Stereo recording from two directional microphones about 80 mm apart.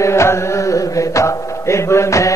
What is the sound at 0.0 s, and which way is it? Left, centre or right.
Mantra, left.